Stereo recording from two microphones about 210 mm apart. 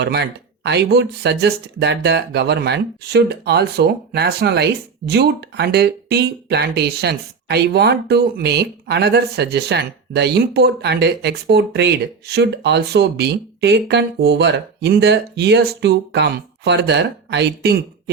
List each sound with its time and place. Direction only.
0.0 s speech: 55° right (ahead or behind)